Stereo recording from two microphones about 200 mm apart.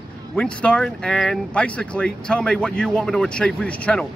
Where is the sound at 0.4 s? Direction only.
5° left (ahead or behind).